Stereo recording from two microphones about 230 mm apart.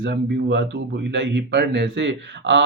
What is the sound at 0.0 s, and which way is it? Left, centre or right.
Speech, right.